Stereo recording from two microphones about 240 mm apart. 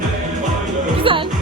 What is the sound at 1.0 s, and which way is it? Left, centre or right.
Music, right.